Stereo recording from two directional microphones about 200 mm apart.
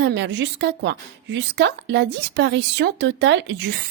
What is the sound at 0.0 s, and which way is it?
A woman's voice, 60° right (ahead or behind).